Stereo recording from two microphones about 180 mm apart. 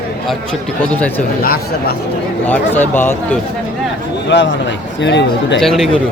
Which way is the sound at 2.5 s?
10° left (ahead or behind).